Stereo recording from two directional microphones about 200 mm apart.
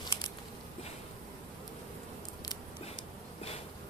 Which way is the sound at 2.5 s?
25° left (ahead or behind).